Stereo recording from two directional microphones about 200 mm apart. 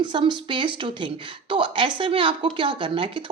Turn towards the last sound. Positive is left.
turn(degrees=-25)  # may be behind; listen again after turning